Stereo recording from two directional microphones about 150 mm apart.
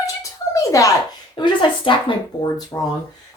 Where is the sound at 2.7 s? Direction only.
15° left (ahead or behind).